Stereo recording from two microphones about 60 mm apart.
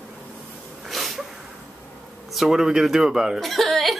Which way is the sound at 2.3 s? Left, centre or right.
Centre.